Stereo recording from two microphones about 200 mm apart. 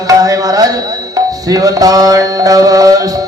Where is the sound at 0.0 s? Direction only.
20° right (ahead or behind).